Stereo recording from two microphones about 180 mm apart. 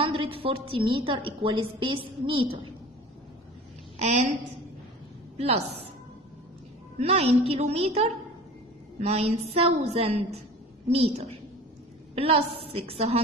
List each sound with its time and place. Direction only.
0.0 s a woman's voice: 30° right (ahead or behind)
4.0 s a woman's voice: 40° right (ahead or behind)
5.4 s a woman's voice: 35° right (ahead or behind)
7.0 s a woman's voice: 35° right (ahead or behind)